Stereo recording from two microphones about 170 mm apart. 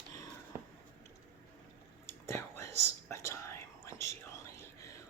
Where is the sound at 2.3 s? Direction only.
15° left (ahead or behind).